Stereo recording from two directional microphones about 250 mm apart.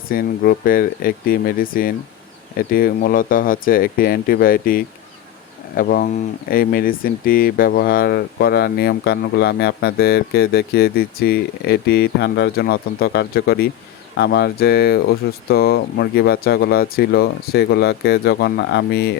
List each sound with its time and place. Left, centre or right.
0.1 s speech: left